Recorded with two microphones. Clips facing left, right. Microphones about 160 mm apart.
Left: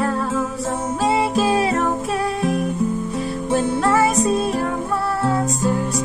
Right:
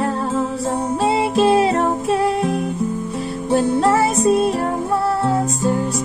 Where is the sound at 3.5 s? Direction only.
30° right (ahead or behind).